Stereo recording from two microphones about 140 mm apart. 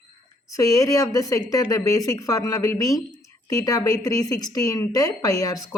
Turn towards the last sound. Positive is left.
turn(degrees=25)  # may be behind; listen again after turning